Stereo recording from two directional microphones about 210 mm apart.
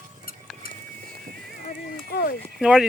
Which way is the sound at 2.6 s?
5° right (ahead or behind).